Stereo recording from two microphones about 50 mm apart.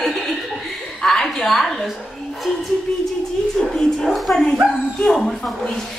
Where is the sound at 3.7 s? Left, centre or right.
Centre.